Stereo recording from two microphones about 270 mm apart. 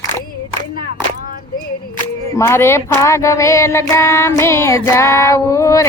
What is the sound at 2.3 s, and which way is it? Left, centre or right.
Child singing, centre.